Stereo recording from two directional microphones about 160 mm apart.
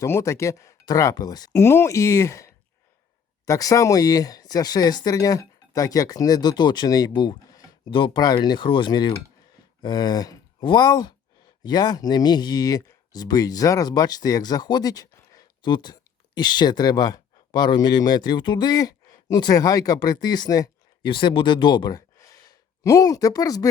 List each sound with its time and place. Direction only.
0.0 s speech: 20° left (ahead or behind)